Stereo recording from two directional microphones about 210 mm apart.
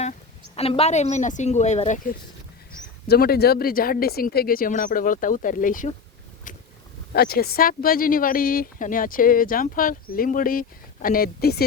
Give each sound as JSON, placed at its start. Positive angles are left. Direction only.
{"t": 0.0, "sound": "a woman's voice", "side_deg": 30}
{"t": 3.1, "sound": "speech", "side_deg": 50}
{"t": 7.1, "sound": "speech", "side_deg": 45}